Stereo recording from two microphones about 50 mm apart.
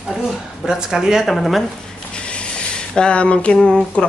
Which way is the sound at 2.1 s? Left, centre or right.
Left.